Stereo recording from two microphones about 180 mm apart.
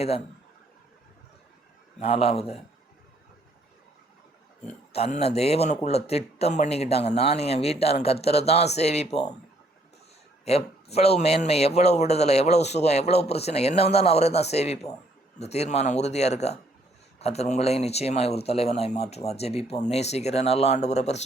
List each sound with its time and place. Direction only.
2.0 s speech: 30° left (ahead or behind)
4.9 s speech: 35° left (ahead or behind)
10.4 s speech: 35° left (ahead or behind)